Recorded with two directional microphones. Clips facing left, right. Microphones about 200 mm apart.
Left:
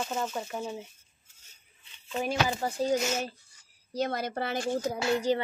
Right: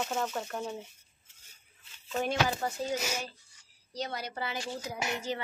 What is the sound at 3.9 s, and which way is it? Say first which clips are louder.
Speech: left 6 dB; 50° left (ahead or behind).